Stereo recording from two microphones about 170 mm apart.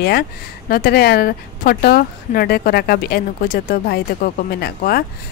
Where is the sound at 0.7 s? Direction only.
60° left (ahead or behind).